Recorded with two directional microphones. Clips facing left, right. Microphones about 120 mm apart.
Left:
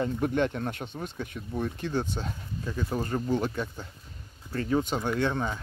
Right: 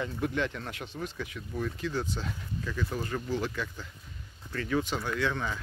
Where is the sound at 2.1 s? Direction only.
30° left (ahead or behind).